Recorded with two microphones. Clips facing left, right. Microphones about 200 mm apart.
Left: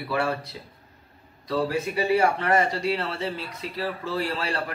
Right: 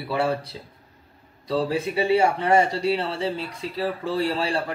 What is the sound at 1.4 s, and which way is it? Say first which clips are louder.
Speech: right 2 dB; 30° right (ahead or behind).